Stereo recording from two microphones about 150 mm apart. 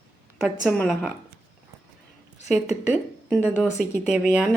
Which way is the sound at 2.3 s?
50° left (ahead or behind).